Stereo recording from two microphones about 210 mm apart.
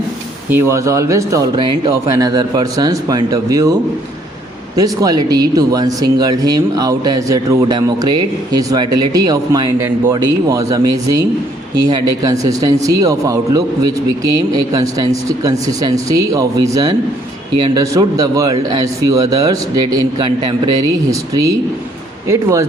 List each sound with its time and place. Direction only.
0.5 s speech: 15° right (ahead or behind)
4.8 s speech: 15° right (ahead or behind)
22.3 s speech: 15° right (ahead or behind)